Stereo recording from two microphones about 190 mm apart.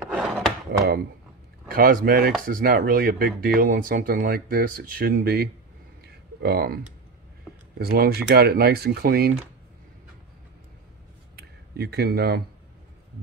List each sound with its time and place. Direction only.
0.1 s wood: centre (ahead or behind)
1.7 s speech: 50° right (ahead or behind)
11.3 s speech: 60° right (ahead or behind)